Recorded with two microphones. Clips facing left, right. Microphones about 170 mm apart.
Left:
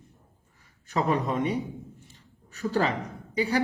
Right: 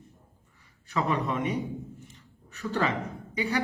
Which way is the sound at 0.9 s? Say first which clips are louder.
Left 2 dB; 35° left (ahead or behind).